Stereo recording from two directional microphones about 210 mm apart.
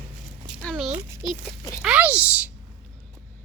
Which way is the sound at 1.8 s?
5° right (ahead or behind).